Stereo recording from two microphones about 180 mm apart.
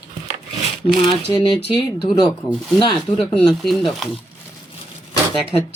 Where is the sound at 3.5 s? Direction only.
Centre (ahead or behind).